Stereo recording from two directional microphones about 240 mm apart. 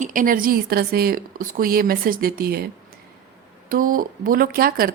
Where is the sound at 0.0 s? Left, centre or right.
Right.